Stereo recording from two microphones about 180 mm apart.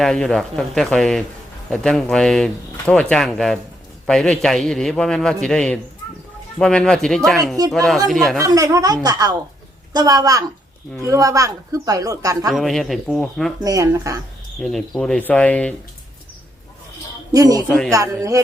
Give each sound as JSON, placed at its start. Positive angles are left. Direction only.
{"t": 0.0, "sound": "speech", "side_deg": 5}
{"t": 8.4, "sound": "speech", "side_deg": -20}
{"t": 12.5, "sound": "speech", "side_deg": 0}
{"t": 13.6, "sound": "speech", "side_deg": -20}
{"t": 14.6, "sound": "speech", "side_deg": 0}
{"t": 17.3, "sound": "speech", "side_deg": -20}
{"t": 17.7, "sound": "speech", "side_deg": 5}
{"t": 17.9, "sound": "speech", "side_deg": -20}